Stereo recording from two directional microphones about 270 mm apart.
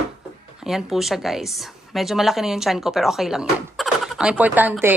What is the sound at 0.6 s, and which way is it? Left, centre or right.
A woman's voice, centre.